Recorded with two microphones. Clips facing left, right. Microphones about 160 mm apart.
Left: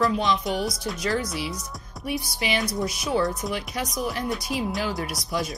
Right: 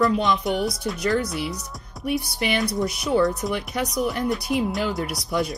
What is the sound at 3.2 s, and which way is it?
Speech, centre (ahead or behind).